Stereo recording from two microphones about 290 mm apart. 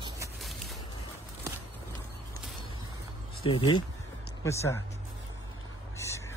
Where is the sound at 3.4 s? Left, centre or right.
Centre.